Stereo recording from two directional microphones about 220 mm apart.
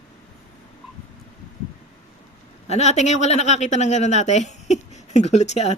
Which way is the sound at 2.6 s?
30° left (ahead or behind).